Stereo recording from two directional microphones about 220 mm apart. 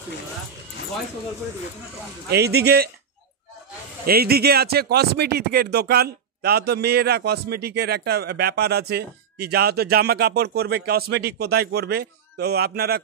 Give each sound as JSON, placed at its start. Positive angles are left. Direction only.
{"t": 2.2, "sound": "speech", "side_deg": -45}
{"t": 4.0, "sound": "speech", "side_deg": -45}